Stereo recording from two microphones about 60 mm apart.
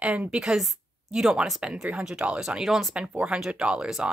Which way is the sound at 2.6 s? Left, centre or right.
Centre.